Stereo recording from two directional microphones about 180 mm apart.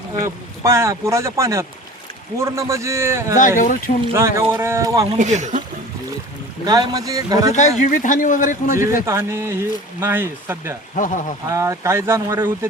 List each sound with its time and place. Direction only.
0.1 s speech: 15° right (ahead or behind)
3.6 s a man's voice: 45° left (ahead or behind)
4.5 s speech: 15° right (ahead or behind)
5.1 s speech: 40° right (ahead or behind)
6.7 s speech: 20° right (ahead or behind)
7.5 s a man's voice: 45° left (ahead or behind)
9.0 s speech: 15° right (ahead or behind)
10.9 s a man's voice: 45° left (ahead or behind)
11.4 s speech: 15° right (ahead or behind)